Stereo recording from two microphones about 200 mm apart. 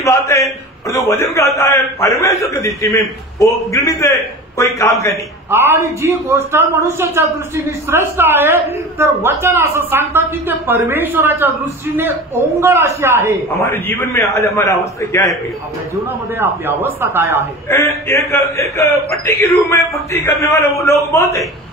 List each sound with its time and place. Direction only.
0.0 s a man's voice: 15° left (ahead or behind)
5.5 s a man's voice: 10° right (ahead or behind)
13.8 s a man's voice: 15° left (ahead or behind)
16.3 s a man's voice: 10° right (ahead or behind)
17.6 s a man's voice: 15° left (ahead or behind)